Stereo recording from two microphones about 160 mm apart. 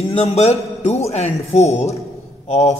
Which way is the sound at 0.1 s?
40° left (ahead or behind).